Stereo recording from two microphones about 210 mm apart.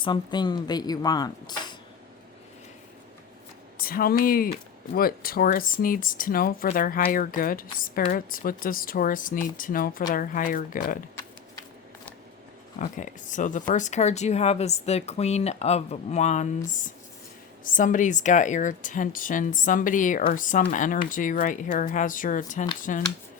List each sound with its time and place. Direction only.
0.0 s speech: 20° left (ahead or behind)
3.8 s speech: 45° left (ahead or behind)
12.8 s speech: 35° left (ahead or behind)
17.6 s speech: 40° left (ahead or behind)